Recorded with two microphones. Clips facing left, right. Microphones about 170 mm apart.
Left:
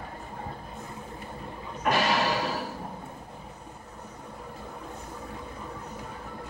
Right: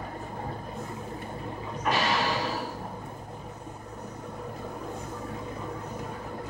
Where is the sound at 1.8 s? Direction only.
50° left (ahead or behind).